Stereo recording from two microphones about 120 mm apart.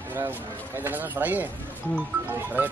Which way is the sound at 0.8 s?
15° right (ahead or behind).